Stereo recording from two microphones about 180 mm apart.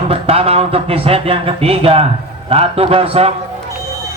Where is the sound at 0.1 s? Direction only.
35° right (ahead or behind).